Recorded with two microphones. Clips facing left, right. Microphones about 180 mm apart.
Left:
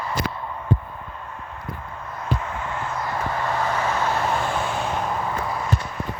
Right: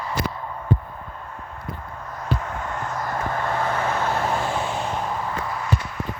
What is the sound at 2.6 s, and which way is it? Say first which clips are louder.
Vehicle: even; 45° right (ahead or behind).